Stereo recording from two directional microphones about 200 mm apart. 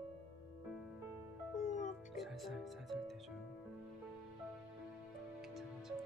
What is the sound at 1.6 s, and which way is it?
Music, 40° left (ahead or behind).